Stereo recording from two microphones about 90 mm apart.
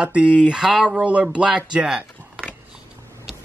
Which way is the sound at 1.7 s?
10° right (ahead or behind).